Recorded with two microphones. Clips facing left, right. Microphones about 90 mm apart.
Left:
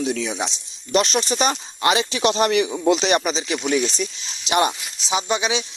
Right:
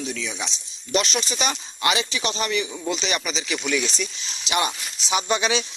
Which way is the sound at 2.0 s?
55° left (ahead or behind).